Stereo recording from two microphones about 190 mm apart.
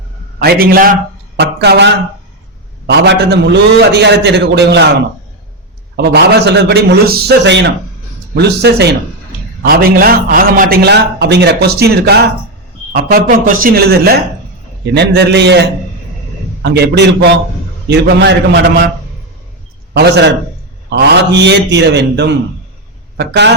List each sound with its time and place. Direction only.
0.3 s a man's voice: 50° right (ahead or behind)
6.0 s a man's voice: 60° right (ahead or behind)
16.6 s a man's voice: 65° right (ahead or behind)
19.9 s a man's voice: 60° right (ahead or behind)